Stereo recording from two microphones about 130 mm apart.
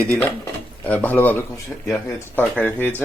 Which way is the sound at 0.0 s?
10° left (ahead or behind).